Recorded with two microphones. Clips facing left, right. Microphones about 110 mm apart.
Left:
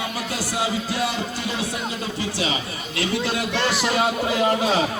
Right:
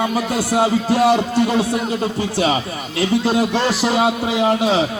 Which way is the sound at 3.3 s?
35° right (ahead or behind).